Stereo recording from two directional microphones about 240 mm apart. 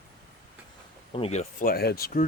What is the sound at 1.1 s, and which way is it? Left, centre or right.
Speech, left.